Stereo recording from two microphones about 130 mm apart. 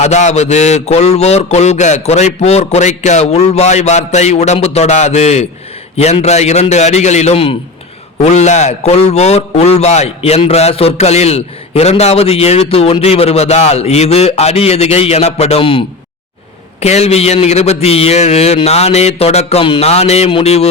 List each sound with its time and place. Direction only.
0.0 s a man's voice: 60° left (ahead or behind); by 15.8 s 45° left (ahead or behind)
16.8 s a man's voice: 55° left (ahead or behind)